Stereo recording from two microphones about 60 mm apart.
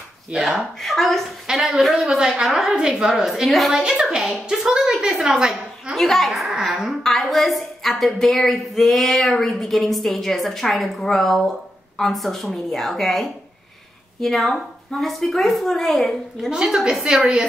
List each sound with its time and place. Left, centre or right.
0.3 s a woman's voice: centre
3.8 s a woman's voice: centre
5.9 s a child's voice: centre
16.4 s a woman's voice: centre